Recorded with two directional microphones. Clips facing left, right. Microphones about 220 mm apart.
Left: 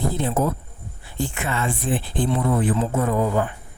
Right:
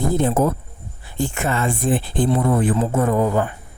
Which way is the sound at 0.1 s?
45° right (ahead or behind).